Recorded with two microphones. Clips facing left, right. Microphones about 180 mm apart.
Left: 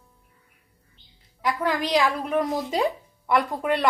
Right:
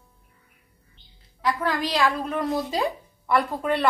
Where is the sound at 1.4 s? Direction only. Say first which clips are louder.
Even; 15° left (ahead or behind).